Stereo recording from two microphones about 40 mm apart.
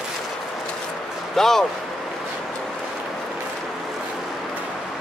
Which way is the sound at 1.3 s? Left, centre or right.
Centre.